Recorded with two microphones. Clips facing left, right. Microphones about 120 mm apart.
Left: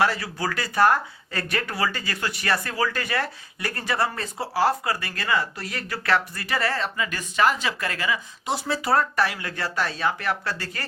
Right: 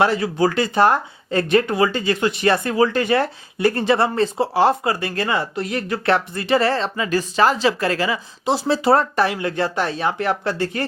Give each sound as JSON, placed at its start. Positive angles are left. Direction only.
{"t": 0.0, "sound": "speech", "side_deg": -25}